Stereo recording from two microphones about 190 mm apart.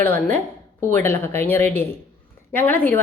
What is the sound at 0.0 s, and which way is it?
A woman's voice, 10° left (ahead or behind).